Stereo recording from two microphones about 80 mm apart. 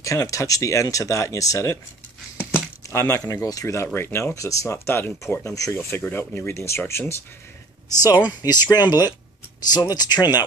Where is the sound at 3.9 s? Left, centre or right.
Left.